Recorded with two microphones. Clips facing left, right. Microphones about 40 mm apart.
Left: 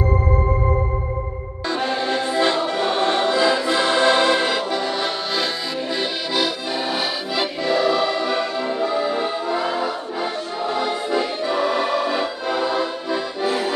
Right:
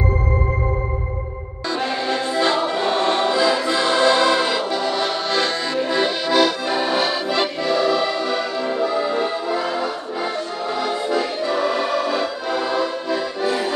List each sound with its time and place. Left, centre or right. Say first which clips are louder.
1.8 s music: even; centre
5.9 s accordion: right 5 dB; centre
12.4 s music: left 1 dB; centre
13.1 s accordion: right 1 dB; centre